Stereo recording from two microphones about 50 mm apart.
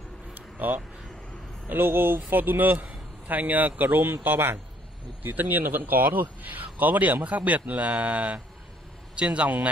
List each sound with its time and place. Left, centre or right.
0.3 s a sound: right
1.7 s speech: right
5.2 s a man's voice: right